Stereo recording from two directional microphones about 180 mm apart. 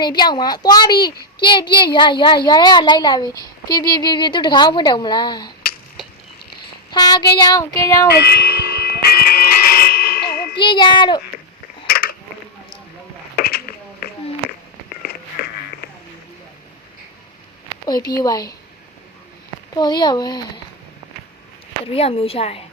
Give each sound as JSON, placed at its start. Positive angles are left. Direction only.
{"t": 0.0, "sound": "a child's voice", "side_deg": 25}
{"t": 6.9, "sound": "a child's voice", "side_deg": 25}
{"t": 8.1, "sound": "speech", "side_deg": 60}
{"t": 8.8, "sound": "a sound", "side_deg": 60}
{"t": 10.6, "sound": "a child's voice", "side_deg": 25}
{"t": 11.9, "sound": "a sound", "side_deg": 55}
{"t": 13.3, "sound": "a sound", "side_deg": 55}
{"t": 17.8, "sound": "a child's voice", "side_deg": 20}
{"t": 19.7, "sound": "a child's voice", "side_deg": 25}
{"t": 21.8, "sound": "a woman's voice", "side_deg": 30}